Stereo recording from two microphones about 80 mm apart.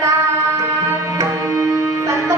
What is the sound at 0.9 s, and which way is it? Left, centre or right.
Tabla, right.